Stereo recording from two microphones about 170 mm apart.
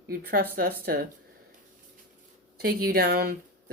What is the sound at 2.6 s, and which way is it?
Speech, 65° right (ahead or behind).